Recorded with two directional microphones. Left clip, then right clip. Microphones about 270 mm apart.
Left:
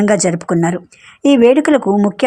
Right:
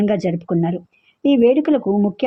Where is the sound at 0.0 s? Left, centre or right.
Centre.